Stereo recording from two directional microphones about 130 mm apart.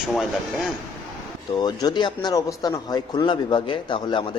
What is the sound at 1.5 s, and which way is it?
Speech, 35° left (ahead or behind).